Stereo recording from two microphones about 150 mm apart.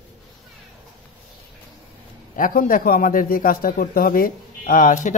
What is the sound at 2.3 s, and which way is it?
A man's voice, 65° left (ahead or behind).